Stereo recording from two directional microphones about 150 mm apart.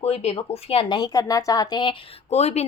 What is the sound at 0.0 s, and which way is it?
Speech, 40° left (ahead or behind).